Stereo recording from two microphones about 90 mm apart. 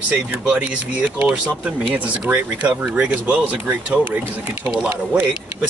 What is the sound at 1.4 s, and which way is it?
Speech, 15° right (ahead or behind).